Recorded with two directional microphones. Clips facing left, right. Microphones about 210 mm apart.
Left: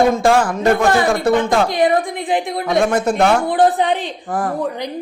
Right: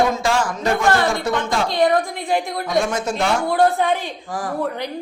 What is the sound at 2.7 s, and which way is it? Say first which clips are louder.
Speech: left 6 dB; 55° left (ahead or behind).